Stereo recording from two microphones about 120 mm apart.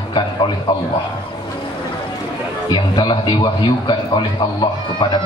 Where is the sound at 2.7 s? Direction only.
40° left (ahead or behind).